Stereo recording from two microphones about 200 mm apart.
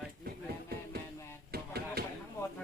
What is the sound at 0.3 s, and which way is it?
Music, 50° right (ahead or behind).